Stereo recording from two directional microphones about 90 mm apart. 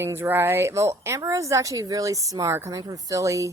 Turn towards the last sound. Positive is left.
turn(degrees=-35)  # may be behind; listen again after turning